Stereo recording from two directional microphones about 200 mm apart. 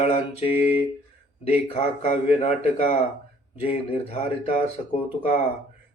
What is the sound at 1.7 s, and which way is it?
A man's voice, 30° left (ahead or behind).